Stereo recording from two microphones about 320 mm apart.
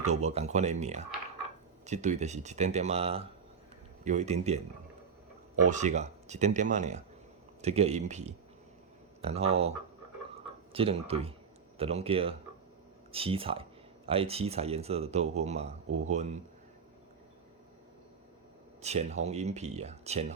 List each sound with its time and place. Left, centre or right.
0.0 s speech: right
5.6 s speech: right
10.3 s a sound: centre
11.8 s speech: centre
18.8 s speech: right